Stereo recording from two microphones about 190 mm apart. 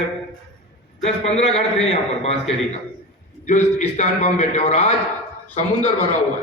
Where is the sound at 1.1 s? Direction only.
35° left (ahead or behind).